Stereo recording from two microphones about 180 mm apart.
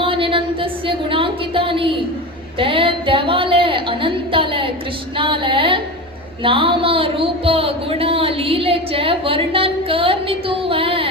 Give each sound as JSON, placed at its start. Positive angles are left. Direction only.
{"t": 0.0, "sound": "a woman's voice", "side_deg": -30}